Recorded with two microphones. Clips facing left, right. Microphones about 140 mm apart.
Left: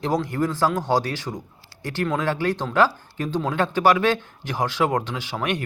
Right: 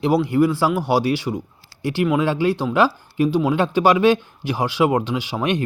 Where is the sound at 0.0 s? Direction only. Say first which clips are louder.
Right 6 dB; 10° right (ahead or behind).